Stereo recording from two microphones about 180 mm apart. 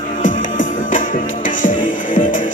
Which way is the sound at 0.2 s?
45° left (ahead or behind).